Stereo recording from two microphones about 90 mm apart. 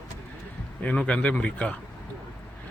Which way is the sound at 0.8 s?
15° left (ahead or behind).